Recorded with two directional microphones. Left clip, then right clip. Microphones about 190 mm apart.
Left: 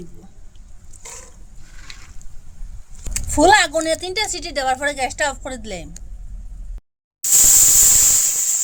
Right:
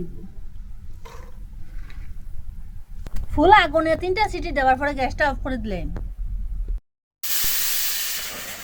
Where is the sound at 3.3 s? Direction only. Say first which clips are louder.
Left 1 dB; 25° left (ahead or behind).